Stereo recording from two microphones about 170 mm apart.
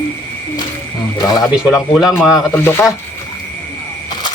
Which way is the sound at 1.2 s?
20° left (ahead or behind).